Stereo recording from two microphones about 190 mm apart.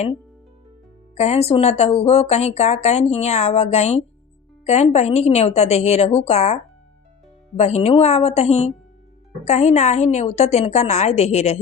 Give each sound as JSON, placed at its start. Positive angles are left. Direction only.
{"t": 1.1, "sound": "speech", "side_deg": 35}